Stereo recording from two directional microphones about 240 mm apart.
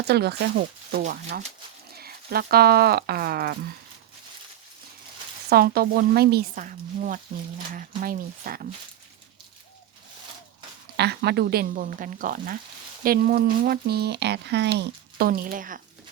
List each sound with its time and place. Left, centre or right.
0.0 s speech: right
5.5 s speech: right
10.9 s speech: right